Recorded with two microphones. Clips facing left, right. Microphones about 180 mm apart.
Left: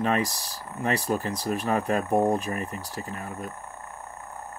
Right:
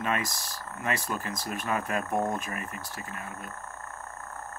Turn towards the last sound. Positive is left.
turn(degrees=35)  # may be behind; listen again after turning